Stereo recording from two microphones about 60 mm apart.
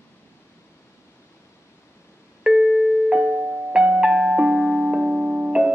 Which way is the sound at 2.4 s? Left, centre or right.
Centre.